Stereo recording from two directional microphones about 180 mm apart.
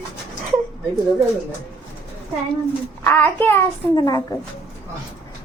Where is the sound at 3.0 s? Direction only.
10° left (ahead or behind).